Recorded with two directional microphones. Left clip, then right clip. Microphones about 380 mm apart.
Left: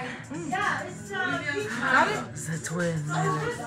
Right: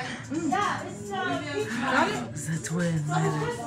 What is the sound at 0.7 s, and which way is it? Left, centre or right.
A woman's voice, centre.